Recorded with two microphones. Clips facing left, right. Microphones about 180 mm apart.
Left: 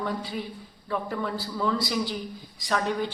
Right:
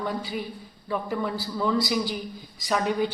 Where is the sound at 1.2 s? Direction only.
5° right (ahead or behind).